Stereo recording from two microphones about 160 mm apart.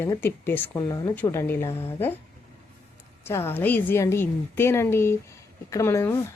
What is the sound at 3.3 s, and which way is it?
Speech, 15° left (ahead or behind).